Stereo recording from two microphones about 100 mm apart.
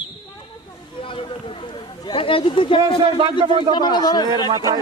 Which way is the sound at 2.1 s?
65° left (ahead or behind).